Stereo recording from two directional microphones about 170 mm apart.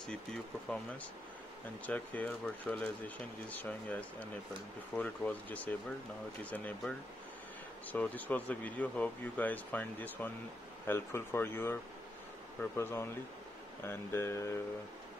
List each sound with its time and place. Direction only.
1.9 s speech: 10° left (ahead or behind)